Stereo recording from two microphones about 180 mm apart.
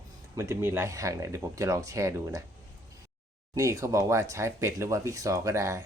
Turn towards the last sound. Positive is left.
turn(degrees=-15)  # may be behind; listen again after turning